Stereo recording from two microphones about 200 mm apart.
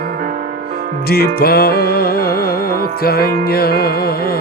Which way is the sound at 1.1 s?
50° left (ahead or behind).